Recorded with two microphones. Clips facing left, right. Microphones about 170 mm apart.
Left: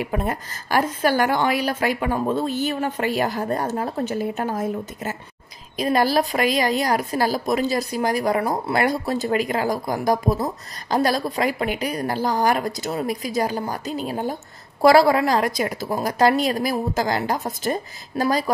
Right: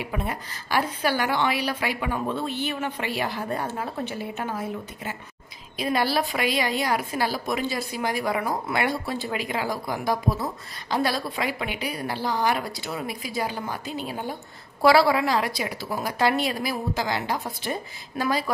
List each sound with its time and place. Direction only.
0.0 s a woman's voice: 45° left (ahead or behind)